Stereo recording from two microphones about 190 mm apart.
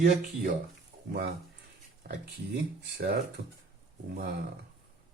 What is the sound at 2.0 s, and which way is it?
Speech, 50° right (ahead or behind).